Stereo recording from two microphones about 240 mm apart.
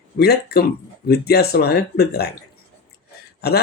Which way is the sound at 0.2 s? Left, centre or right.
Left.